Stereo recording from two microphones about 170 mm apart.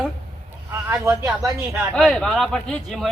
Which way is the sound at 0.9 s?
15° right (ahead or behind).